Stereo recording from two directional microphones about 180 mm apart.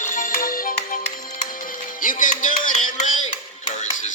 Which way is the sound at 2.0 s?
45° left (ahead or behind).